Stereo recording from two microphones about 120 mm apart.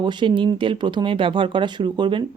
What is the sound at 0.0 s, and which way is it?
Speech, 40° right (ahead or behind).